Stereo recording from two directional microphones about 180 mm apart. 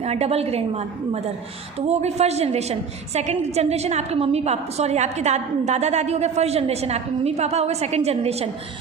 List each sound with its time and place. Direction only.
0.0 s a woman's voice: 35° right (ahead or behind)